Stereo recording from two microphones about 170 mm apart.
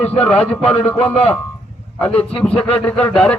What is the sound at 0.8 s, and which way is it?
Speech, 35° left (ahead or behind).